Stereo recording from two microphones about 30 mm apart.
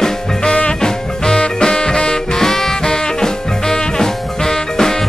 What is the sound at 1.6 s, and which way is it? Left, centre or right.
Swing music, left.